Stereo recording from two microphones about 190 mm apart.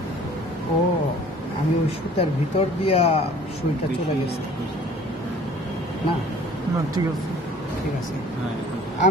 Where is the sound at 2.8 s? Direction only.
30° left (ahead or behind).